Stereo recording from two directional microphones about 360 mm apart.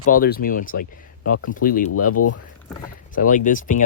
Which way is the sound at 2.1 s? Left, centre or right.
Left.